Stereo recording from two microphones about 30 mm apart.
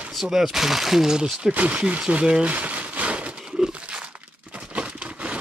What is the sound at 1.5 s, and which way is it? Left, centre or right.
Speech, right.